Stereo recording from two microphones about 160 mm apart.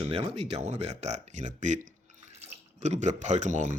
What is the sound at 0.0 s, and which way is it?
Speech, 40° right (ahead or behind).